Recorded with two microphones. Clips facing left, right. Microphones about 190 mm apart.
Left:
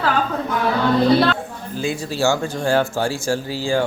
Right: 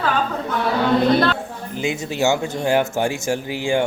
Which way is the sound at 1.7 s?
20° right (ahead or behind).